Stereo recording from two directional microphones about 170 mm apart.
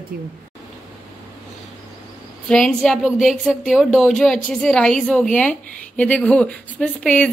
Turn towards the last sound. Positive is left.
turn(degrees=10)  # may be behind; listen again after turning